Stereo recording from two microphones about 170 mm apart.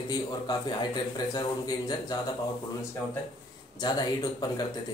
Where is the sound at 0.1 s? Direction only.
25° left (ahead or behind).